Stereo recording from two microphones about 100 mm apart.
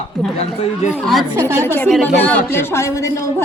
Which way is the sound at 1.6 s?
20° left (ahead or behind).